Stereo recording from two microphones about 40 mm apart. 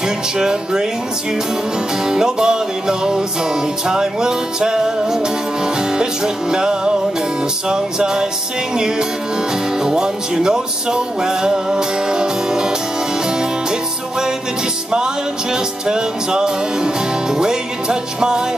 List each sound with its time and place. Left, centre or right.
0.4 s music: centre
2.0 s music: centre
9.8 s music: centre
15.5 s music: centre